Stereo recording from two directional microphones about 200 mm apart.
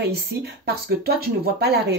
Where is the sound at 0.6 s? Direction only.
50° right (ahead or behind).